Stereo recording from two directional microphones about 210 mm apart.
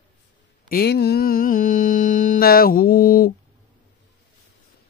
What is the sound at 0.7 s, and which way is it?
Mantra, 50° left (ahead or behind).